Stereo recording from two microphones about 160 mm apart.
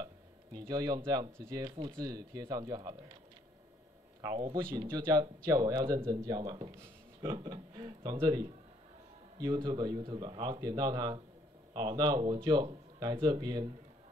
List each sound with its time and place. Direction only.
0.0 s speech: 25° right (ahead or behind)
4.2 s speech: 25° right (ahead or behind)